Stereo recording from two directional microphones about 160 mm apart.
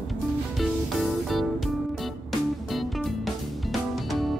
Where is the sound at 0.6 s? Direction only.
Centre (ahead or behind).